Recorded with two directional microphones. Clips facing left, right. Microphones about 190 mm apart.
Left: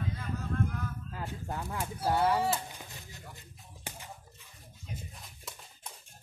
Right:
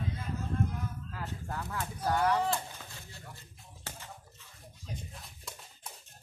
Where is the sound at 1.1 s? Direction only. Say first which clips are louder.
Left 2 dB; 20° left (ahead or behind).